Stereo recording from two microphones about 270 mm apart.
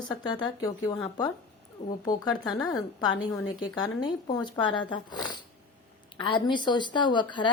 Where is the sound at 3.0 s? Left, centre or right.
Centre.